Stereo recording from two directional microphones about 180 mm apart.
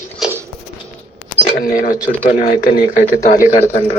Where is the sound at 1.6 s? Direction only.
50° left (ahead or behind).